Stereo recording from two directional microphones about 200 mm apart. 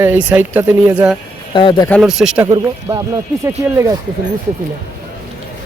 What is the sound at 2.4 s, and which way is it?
Speech, 15° right (ahead or behind).